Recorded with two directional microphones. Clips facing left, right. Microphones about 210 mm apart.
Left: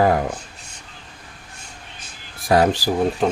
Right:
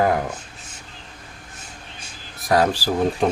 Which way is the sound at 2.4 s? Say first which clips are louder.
Left 2 dB; 25° left (ahead or behind).